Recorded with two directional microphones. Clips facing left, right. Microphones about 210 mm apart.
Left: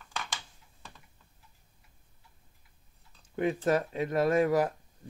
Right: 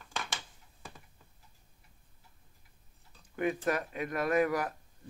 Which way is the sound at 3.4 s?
30° left (ahead or behind).